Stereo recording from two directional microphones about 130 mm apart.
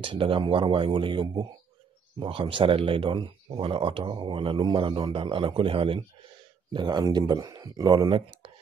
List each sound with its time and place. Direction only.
0.0 s speech: 40° right (ahead or behind)